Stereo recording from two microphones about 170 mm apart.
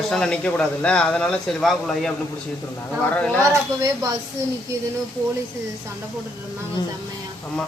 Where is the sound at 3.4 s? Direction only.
20° right (ahead or behind).